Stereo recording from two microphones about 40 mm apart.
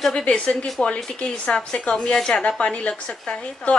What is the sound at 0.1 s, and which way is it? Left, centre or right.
A woman's voice, left.